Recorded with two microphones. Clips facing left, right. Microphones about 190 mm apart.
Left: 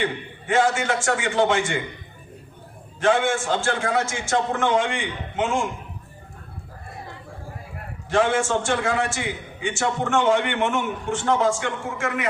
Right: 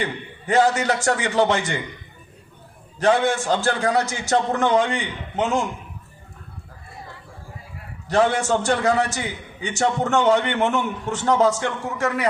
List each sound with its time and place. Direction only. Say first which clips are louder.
0.0 s a man's voice: left 1 dB; 40° right (ahead or behind)
3.0 s a man's voice: right 2 dB; 40° right (ahead or behind)
8.0 s a man's voice: right 1 dB; 40° right (ahead or behind)